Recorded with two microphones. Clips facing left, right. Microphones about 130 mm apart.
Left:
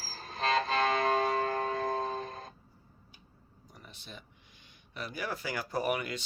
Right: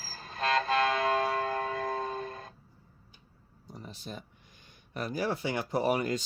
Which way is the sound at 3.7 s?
35° right (ahead or behind).